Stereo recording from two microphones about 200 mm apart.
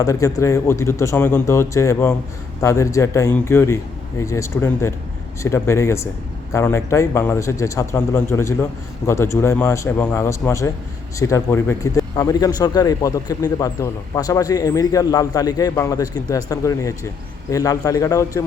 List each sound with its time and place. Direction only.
0.0 s a man's voice: 15° left (ahead or behind)